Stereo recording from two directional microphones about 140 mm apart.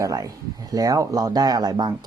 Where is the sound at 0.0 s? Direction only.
25° right (ahead or behind).